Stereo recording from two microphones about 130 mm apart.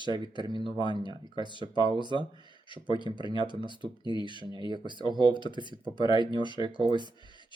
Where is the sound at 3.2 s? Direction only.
40° left (ahead or behind).